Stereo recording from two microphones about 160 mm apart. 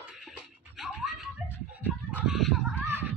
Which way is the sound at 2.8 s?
15° right (ahead or behind).